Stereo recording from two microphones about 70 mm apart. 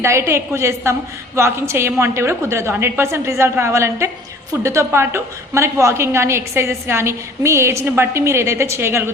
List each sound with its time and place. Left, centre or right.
0.0 s a woman's voice: right